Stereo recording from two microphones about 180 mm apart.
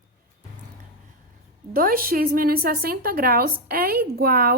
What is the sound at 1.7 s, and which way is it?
A woman's voice, 55° right (ahead or behind).